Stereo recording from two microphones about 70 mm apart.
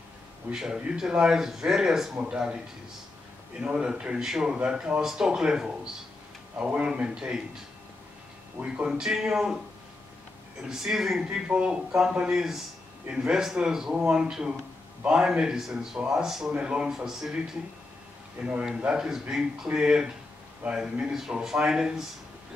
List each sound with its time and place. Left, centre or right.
0.5 s speech: centre
3.6 s speech: centre
8.8 s speech: centre
10.7 s speech: centre
11.2 s a man's voice: centre
18.4 s speech: centre